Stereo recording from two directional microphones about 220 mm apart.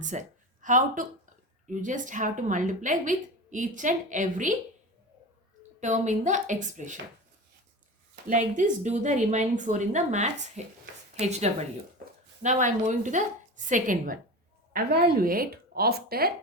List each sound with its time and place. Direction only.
0.0 s a woman's voice: 35° right (ahead or behind)
5.8 s a woman's voice: 35° right (ahead or behind)
8.1 s a woman's voice: 35° right (ahead or behind)